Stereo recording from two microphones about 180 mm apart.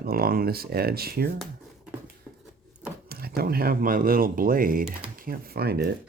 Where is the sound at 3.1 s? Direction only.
60° right (ahead or behind).